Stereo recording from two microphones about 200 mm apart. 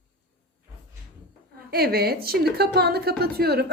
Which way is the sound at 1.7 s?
50° right (ahead or behind).